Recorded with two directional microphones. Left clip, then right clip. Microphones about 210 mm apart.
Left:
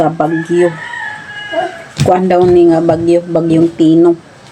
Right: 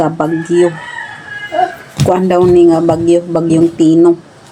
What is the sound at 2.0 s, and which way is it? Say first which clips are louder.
Speech: left 1 dB; centre (ahead or behind).